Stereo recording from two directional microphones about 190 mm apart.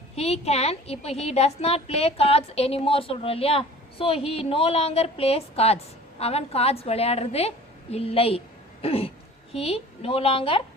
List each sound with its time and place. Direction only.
0.2 s a woman's voice: 35° left (ahead or behind)